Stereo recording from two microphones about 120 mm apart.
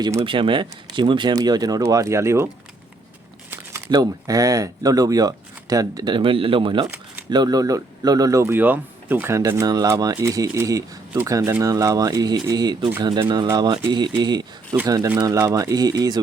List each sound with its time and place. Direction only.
0.3 s speech: 45° right (ahead or behind); by 2.5 s 25° right (ahead or behind)
3.8 s speech: 30° right (ahead or behind)
6.1 s a man's voice: 50° right (ahead or behind)
7.3 s speech: 35° right (ahead or behind)